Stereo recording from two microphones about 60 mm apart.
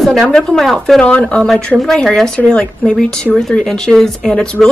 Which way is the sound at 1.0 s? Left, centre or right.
Left.